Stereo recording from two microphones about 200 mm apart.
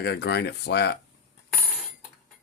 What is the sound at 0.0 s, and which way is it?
Speech, 55° left (ahead or behind).